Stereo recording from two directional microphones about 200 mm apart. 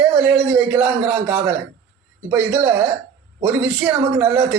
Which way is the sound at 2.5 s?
10° right (ahead or behind).